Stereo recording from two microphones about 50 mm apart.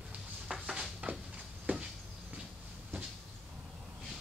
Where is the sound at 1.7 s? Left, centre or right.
Right.